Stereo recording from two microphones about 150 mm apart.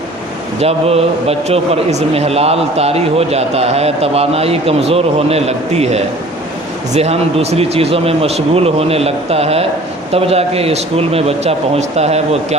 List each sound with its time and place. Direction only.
0.6 s a man's voice: 45° right (ahead or behind)